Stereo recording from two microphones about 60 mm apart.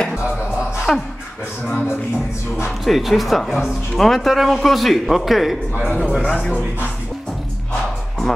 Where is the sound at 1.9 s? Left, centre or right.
Left.